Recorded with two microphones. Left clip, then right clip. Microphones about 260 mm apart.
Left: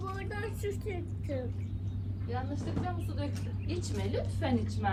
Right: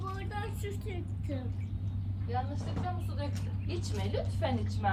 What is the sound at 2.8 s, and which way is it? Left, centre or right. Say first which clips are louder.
A woman's voice: left 1 dB; right.